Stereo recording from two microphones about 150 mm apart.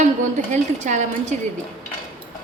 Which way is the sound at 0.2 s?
55° right (ahead or behind).